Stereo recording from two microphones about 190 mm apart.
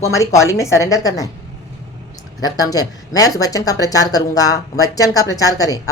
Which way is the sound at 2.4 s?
20° left (ahead or behind).